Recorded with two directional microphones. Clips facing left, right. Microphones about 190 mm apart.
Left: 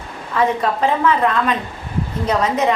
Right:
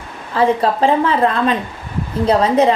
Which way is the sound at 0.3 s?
30° right (ahead or behind).